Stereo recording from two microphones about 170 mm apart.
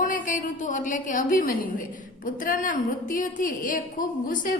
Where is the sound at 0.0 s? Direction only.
50° left (ahead or behind).